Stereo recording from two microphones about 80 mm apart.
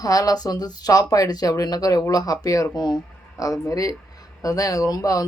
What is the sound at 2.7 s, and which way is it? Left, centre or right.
Speech, left.